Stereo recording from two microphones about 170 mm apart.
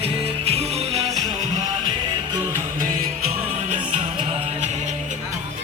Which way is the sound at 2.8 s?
55° right (ahead or behind).